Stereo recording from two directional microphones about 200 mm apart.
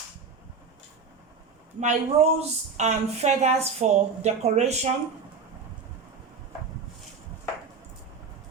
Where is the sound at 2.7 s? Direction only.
35° right (ahead or behind).